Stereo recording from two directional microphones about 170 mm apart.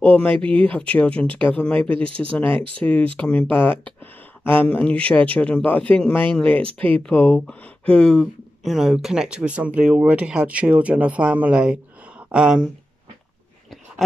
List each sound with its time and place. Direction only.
0.0 s speech: 10° left (ahead or behind)